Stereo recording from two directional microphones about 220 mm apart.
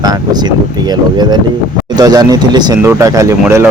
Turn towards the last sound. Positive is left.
turn(degrees=-10)  # may be behind; listen again after turning